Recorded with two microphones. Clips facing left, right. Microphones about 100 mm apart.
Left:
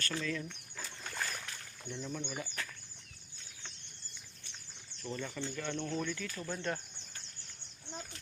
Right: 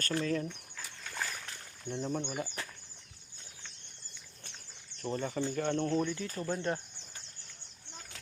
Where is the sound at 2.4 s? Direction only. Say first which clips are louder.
Right 2 dB; 25° right (ahead or behind).